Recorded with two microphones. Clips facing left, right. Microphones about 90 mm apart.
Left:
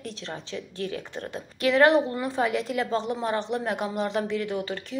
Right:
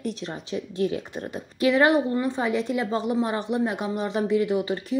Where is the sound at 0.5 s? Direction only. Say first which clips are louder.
Right 8 dB; 20° right (ahead or behind).